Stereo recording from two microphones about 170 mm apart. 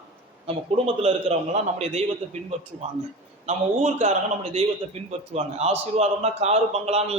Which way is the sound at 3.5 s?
45° right (ahead or behind).